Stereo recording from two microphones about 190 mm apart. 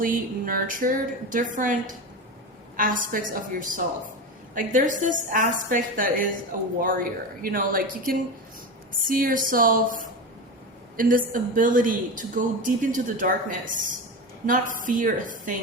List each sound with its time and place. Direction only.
0.0 s a woman's voice: 45° right (ahead or behind)